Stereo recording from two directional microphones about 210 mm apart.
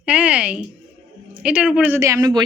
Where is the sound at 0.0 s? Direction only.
5° right (ahead or behind).